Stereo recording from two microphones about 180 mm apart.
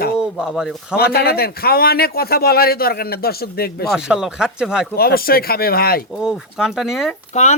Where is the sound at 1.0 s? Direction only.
60° left (ahead or behind).